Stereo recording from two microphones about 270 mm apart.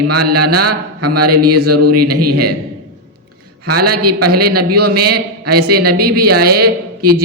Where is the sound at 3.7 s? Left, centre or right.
Right.